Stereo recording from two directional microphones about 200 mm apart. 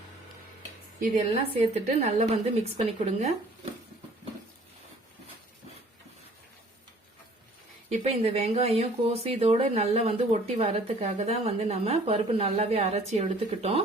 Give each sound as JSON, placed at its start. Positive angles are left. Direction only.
{"t": 1.1, "sound": "speech", "side_deg": -30}
{"t": 7.9, "sound": "speech", "side_deg": -30}